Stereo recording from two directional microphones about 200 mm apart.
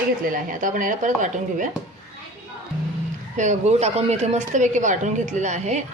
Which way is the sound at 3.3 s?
35° right (ahead or behind).